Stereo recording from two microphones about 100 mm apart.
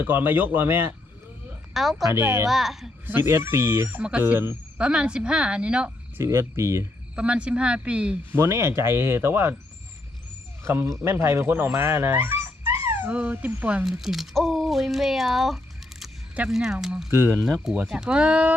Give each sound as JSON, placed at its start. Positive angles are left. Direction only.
{"t": 0.0, "sound": "speech", "side_deg": -20}
{"t": 1.7, "sound": "speech", "side_deg": 0}
{"t": 2.0, "sound": "speech", "side_deg": -25}
{"t": 2.5, "sound": "speech", "side_deg": 0}
{"t": 3.1, "sound": "speech", "side_deg": -20}
{"t": 4.8, "sound": "speech", "side_deg": -10}
{"t": 6.1, "sound": "speech", "side_deg": -25}
{"t": 7.2, "sound": "speech", "side_deg": -10}
{"t": 8.4, "sound": "speech", "side_deg": -25}
{"t": 10.6, "sound": "speech", "side_deg": -25}
{"t": 13.8, "sound": "speech", "side_deg": -5}
{"t": 17.1, "sound": "speech", "side_deg": -30}
{"t": 17.6, "sound": "speech", "side_deg": -5}